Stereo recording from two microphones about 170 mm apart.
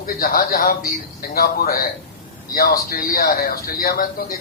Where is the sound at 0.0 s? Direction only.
55° left (ahead or behind).